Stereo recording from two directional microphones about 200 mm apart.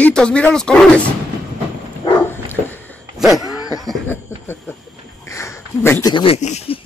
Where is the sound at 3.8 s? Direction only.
Centre (ahead or behind).